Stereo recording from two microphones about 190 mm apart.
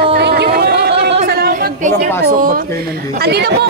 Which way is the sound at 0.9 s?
30° right (ahead or behind).